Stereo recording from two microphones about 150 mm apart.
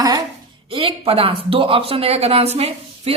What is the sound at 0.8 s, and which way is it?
A woman's voice, 40° right (ahead or behind).